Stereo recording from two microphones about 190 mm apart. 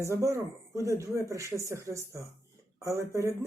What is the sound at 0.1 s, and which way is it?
Speech, 15° right (ahead or behind).